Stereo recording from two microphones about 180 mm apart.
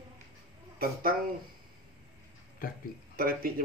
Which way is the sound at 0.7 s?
55° right (ahead or behind).